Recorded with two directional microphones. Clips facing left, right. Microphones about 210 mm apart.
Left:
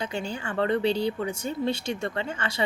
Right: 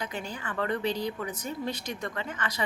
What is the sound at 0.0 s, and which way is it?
A woman's voice, 30° left (ahead or behind).